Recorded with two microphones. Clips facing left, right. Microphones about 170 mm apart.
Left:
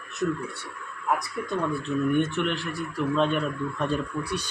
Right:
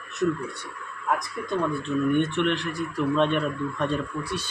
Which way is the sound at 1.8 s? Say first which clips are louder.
Even; 5° left (ahead or behind).